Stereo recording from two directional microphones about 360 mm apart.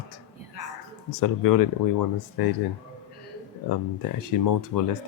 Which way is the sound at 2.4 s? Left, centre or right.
Left.